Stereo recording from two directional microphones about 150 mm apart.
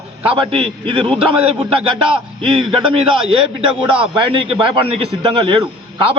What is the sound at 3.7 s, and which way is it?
A man's voice, 35° right (ahead or behind).